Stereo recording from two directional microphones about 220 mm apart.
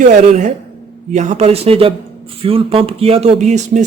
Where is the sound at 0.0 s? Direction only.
35° right (ahead or behind).